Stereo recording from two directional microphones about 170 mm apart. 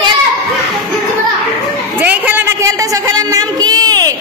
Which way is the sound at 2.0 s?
10° right (ahead or behind).